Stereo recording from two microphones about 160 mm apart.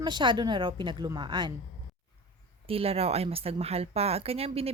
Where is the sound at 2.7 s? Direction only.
35° right (ahead or behind).